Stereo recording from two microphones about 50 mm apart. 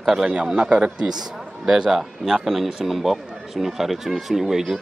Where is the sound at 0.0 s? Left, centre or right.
Centre.